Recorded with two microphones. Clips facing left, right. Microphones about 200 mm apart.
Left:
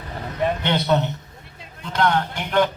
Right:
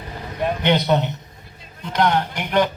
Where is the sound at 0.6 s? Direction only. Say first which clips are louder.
Right 5 dB; 15° right (ahead or behind).